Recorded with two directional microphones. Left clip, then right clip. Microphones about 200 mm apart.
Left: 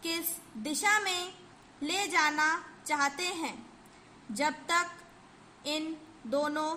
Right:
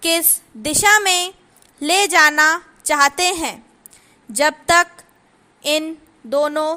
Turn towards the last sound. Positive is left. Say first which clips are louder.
# right 13 dB
turn(degrees=-45)  # may be behind; listen again after turning